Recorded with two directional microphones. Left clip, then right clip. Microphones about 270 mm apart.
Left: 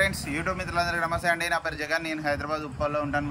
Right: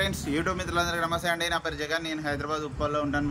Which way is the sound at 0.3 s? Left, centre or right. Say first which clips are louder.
Right 1 dB; centre.